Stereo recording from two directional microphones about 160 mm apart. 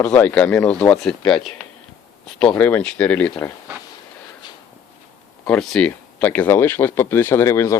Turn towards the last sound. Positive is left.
turn(degrees=20)  # may be behind; listen again after turning